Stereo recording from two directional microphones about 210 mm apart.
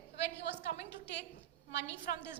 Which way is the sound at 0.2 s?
55° left (ahead or behind).